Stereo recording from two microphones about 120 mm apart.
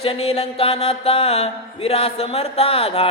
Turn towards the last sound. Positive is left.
turn(degrees=55)  # may be behind; listen again after turning